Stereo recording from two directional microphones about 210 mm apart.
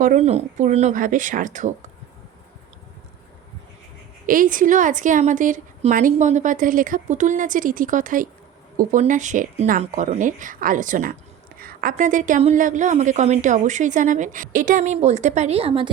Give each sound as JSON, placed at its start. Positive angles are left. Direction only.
{"t": 0.0, "sound": "a woman's voice", "side_deg": -35}
{"t": 4.3, "sound": "a woman's voice", "side_deg": -40}